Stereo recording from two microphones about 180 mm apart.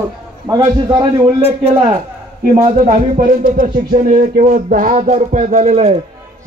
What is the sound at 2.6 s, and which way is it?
A man's voice, 40° right (ahead or behind).